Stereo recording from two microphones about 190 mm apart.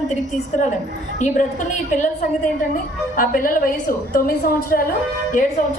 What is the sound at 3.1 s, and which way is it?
A woman's voice, 45° left (ahead or behind).